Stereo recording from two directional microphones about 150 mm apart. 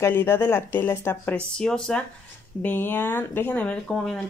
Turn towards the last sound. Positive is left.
turn(degrees=5)  # may be behind; listen again after turning